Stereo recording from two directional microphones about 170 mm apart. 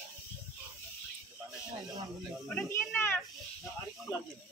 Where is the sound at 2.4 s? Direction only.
5° left (ahead or behind).